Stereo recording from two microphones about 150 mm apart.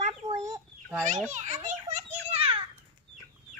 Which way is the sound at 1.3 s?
55° right (ahead or behind).